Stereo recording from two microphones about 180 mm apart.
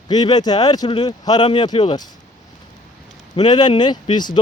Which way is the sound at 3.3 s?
25° left (ahead or behind).